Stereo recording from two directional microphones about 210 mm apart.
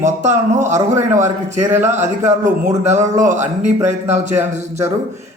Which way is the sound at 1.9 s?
35° right (ahead or behind).